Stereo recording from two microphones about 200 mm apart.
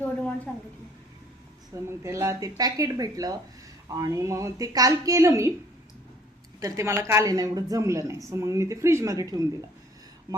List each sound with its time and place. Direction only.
0.5 s a sound: 5° left (ahead or behind)
1.7 s speech: 15° right (ahead or behind)
6.6 s speech: 15° right (ahead or behind)